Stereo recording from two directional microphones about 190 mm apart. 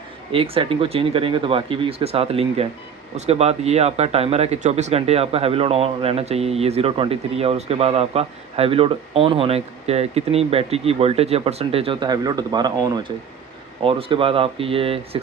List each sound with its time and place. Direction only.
0.3 s speech: 30° right (ahead or behind)